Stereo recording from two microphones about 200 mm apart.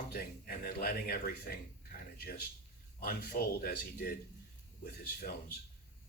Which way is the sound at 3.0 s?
50° left (ahead or behind).